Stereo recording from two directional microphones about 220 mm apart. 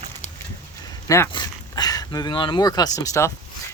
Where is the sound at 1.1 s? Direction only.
15° left (ahead or behind).